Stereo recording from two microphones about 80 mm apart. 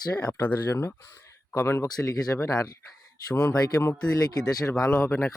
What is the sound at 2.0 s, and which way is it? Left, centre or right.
Speech, left.